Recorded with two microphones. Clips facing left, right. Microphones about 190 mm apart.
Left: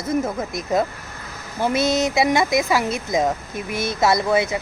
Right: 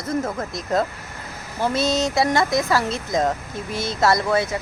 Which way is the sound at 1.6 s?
20° left (ahead or behind).